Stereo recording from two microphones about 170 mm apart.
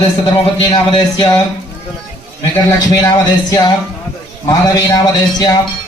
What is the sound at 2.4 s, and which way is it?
A man's voice, 25° left (ahead or behind).